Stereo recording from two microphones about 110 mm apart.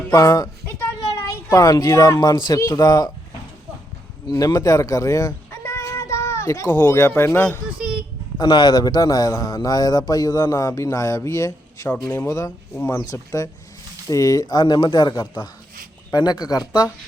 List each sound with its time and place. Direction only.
0.1 s a woman's voice: 30° left (ahead or behind)
4.3 s speech: 35° left (ahead or behind)
7.8 s a child's voice: 5° right (ahead or behind)
8.4 s a man's voice: 40° left (ahead or behind)